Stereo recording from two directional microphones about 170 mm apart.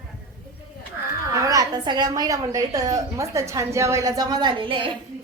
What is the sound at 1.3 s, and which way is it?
A woman's voice, 20° right (ahead or behind).